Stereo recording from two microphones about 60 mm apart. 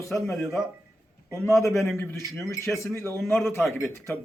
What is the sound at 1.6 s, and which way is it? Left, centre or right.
A man's voice, left.